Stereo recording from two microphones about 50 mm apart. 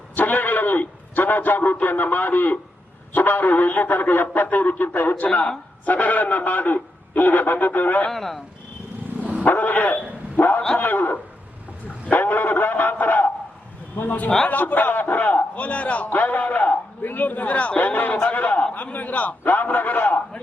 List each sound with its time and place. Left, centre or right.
0.2 s a sound: left
3.1 s a man's voice: left
5.3 s speech: centre
5.8 s a man's voice: left
8.1 s speech: centre
9.4 s dog: left
10.8 s a man's voice: left